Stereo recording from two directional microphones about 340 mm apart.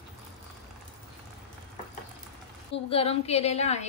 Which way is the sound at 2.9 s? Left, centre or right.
Centre.